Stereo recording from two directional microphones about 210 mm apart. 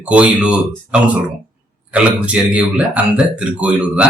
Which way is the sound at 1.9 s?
5° right (ahead or behind).